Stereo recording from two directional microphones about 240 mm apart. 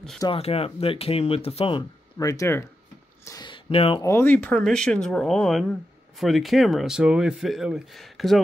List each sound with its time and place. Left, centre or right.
0.2 s speech: left
3.3 s a sound: centre
4.0 s speech: centre